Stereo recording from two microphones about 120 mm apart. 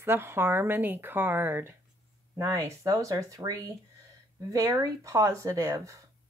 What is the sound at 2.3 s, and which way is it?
Speech, 30° right (ahead or behind).